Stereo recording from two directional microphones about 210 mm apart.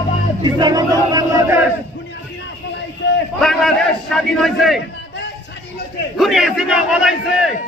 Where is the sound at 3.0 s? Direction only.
60° left (ahead or behind).